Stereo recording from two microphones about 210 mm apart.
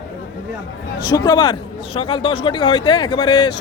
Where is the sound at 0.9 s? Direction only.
20° left (ahead or behind).